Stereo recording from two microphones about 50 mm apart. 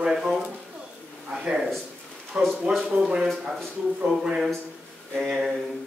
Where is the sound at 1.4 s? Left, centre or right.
Centre.